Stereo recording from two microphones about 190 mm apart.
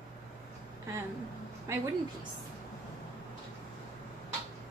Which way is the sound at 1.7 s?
15° right (ahead or behind).